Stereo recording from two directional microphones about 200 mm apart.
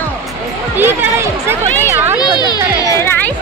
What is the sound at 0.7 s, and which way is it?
Speech, 10° right (ahead or behind).